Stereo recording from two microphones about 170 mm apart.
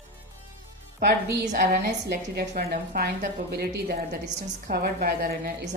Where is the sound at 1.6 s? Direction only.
60° right (ahead or behind).